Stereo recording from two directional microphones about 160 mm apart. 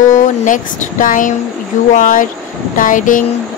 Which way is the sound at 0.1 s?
50° left (ahead or behind).